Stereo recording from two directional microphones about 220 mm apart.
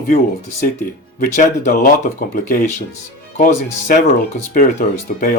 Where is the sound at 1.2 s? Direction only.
35° left (ahead or behind).